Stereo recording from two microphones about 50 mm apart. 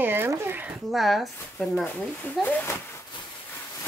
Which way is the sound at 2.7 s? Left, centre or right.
Left.